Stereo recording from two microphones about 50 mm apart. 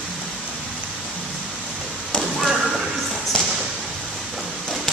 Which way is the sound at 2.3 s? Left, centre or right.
Centre.